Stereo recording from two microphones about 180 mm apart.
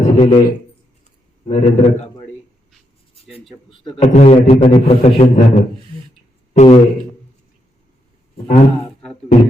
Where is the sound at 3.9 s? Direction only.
40° left (ahead or behind).